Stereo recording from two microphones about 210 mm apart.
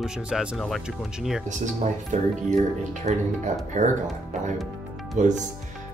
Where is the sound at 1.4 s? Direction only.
35° right (ahead or behind).